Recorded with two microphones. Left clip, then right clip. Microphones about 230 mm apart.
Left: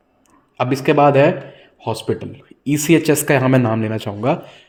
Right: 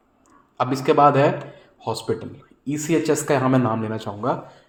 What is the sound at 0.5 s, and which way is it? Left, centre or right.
Speech, left.